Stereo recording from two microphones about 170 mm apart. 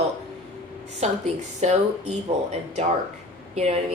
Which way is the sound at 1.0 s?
40° right (ahead or behind).